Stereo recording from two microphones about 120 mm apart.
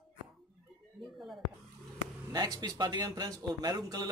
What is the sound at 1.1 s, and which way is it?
Speech, centre (ahead or behind).